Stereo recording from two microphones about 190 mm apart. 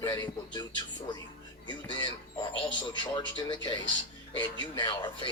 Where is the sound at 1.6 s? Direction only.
25° left (ahead or behind).